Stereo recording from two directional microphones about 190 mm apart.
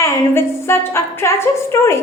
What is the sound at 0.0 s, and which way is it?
Child singing, 15° left (ahead or behind).